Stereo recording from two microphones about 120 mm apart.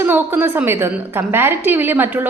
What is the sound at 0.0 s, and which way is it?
A woman's voice, 20° right (ahead or behind).